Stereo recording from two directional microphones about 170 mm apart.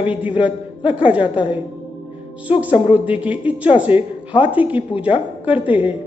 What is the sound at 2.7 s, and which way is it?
Speech, 30° left (ahead or behind).